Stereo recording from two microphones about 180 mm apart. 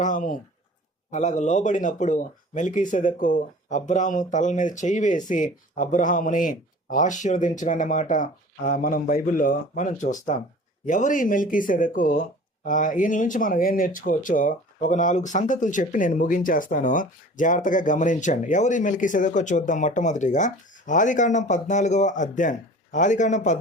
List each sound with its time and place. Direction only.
0.0 s speech: 45° left (ahead or behind)